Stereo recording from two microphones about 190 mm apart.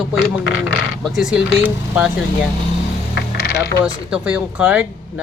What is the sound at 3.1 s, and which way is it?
Coin, 65° left (ahead or behind).